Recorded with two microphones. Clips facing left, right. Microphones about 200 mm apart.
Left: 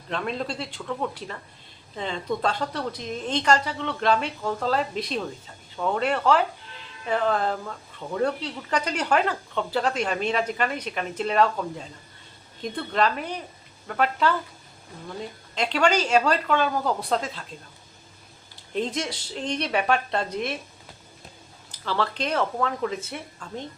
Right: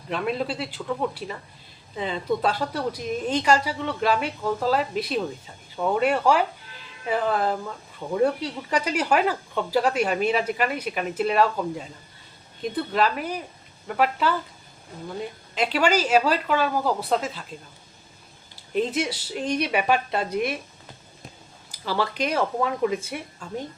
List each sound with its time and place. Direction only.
0.1 s speech: 5° right (ahead or behind)
12.7 s speech: 5° right (ahead or behind)
15.5 s speech: 5° right (ahead or behind)
18.7 s speech: 5° right (ahead or behind)
21.7 s speech: 10° right (ahead or behind)